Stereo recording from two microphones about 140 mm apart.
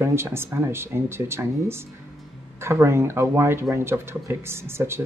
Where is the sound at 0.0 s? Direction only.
20° right (ahead or behind).